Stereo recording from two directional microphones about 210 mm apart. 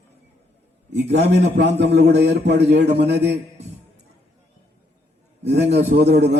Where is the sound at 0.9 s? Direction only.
55° right (ahead or behind).